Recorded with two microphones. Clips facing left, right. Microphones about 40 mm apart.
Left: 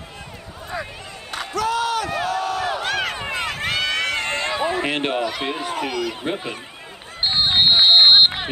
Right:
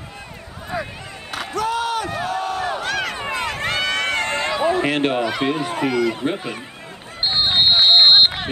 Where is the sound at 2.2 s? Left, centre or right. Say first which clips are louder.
Even; centre.